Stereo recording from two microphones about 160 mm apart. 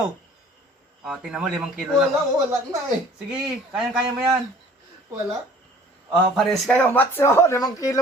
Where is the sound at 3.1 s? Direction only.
5° right (ahead or behind).